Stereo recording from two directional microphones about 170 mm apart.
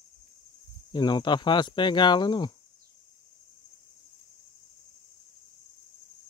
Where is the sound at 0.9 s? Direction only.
25° left (ahead or behind).